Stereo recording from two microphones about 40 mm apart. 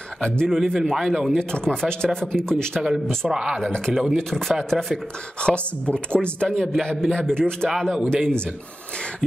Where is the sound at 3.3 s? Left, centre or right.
Centre.